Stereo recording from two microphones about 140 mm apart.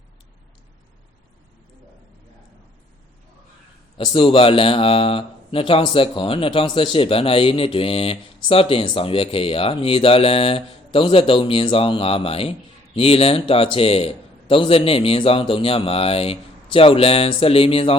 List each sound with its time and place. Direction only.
3.9 s speech: 35° left (ahead or behind)